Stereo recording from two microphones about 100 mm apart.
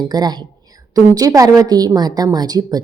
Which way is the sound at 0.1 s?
45° right (ahead or behind).